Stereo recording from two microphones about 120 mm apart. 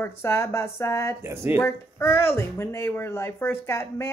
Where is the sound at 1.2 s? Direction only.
20° right (ahead or behind).